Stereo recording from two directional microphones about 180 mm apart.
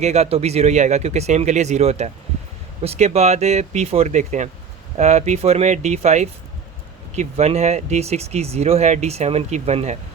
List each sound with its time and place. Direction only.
0.0 s speech: 35° right (ahead or behind)